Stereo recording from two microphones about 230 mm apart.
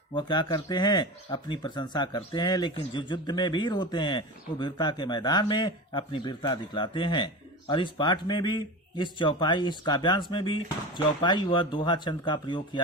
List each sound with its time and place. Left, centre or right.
0.1 s speech: centre